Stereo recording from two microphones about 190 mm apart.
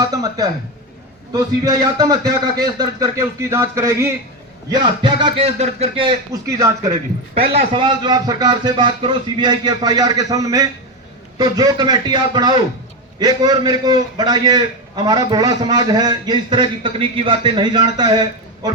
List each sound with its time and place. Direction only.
0.0 s a man's voice: 20° right (ahead or behind)
7.8 s a man's voice: 25° right (ahead or behind)